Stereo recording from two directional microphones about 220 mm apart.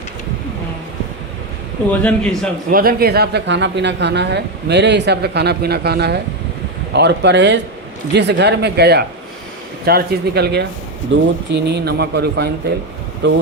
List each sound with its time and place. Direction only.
1.9 s a man's voice: 5° left (ahead or behind)
2.6 s speech: 40° right (ahead or behind)